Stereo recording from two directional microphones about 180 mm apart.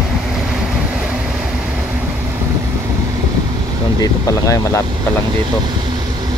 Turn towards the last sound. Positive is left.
turn(degrees=15)  # may be behind; listen again after turning